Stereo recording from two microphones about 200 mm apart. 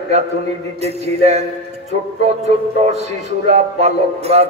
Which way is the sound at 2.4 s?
35° right (ahead or behind).